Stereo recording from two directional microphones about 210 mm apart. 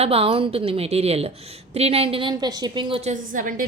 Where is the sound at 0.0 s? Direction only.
30° right (ahead or behind).